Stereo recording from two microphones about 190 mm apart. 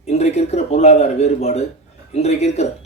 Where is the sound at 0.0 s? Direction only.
35° left (ahead or behind).